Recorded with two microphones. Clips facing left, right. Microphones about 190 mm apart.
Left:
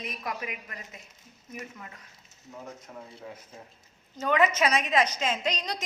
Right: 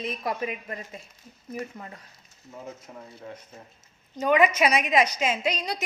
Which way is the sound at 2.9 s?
10° right (ahead or behind).